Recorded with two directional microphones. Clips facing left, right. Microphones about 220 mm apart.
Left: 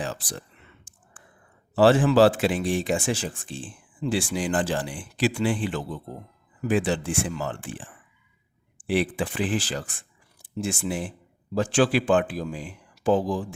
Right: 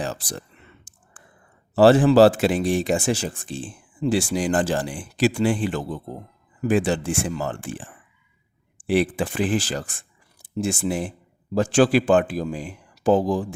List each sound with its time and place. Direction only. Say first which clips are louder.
0.0 s speech: right 3 dB; 40° right (ahead or behind)
0.9 s sigh: right 1 dB; 40° right (ahead or behind)
1.7 s speech: right 4 dB; 40° right (ahead or behind)
8.9 s speech: right 4 dB; 45° right (ahead or behind)